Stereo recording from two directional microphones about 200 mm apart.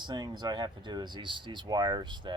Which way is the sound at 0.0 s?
20° right (ahead or behind).